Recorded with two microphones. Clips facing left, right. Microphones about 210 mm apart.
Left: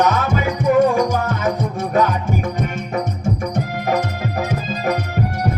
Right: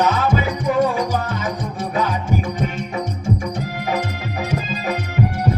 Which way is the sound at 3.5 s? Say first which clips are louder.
Left 3 dB; 50° left (ahead or behind).